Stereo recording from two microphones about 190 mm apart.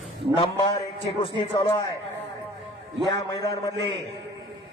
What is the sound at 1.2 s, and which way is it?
Speech, 25° left (ahead or behind).